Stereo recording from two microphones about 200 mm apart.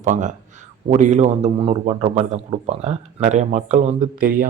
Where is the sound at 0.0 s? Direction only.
40° right (ahead or behind).